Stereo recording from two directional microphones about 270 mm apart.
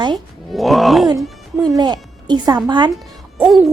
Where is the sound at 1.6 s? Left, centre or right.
Centre.